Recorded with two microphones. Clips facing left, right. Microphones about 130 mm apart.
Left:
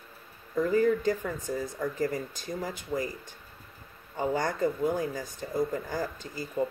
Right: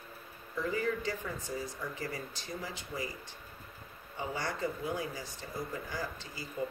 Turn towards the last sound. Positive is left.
turn(degrees=50)  # may be behind; listen again after turning